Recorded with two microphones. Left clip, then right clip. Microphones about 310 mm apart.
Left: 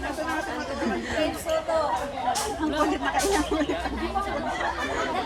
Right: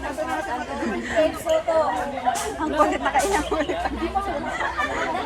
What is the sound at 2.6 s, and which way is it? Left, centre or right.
Speech, centre.